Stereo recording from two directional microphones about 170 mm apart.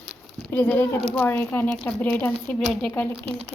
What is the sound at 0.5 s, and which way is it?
A woman's voice, 10° left (ahead or behind).